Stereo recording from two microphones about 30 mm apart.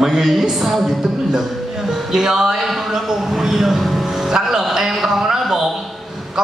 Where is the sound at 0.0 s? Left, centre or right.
Centre.